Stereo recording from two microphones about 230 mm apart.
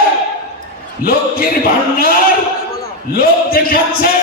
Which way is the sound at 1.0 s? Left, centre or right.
Left.